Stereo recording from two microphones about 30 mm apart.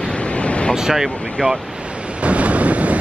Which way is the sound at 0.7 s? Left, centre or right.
Centre.